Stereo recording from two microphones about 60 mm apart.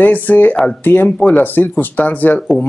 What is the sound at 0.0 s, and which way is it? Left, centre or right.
Speech, left.